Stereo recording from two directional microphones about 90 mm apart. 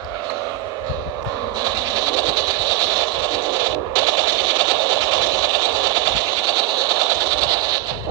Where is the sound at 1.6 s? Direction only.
45° right (ahead or behind).